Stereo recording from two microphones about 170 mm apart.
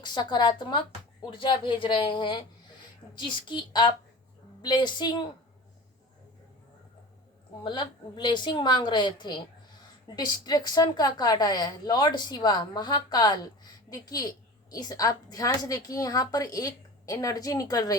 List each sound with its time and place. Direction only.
0.0 s a woman's voice: 25° left (ahead or behind)
7.6 s a woman's voice: 25° left (ahead or behind)